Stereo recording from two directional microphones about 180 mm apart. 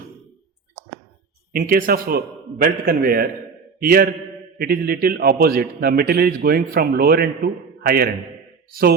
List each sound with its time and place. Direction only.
1.5 s a man's voice: 55° right (ahead or behind)